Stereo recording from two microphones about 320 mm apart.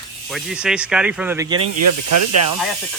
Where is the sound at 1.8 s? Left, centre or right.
Right.